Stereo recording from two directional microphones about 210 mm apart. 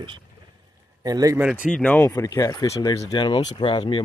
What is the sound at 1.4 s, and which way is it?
Speech, 5° right (ahead or behind).